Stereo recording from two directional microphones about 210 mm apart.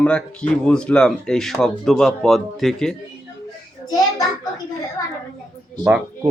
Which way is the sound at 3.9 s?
15° left (ahead or behind).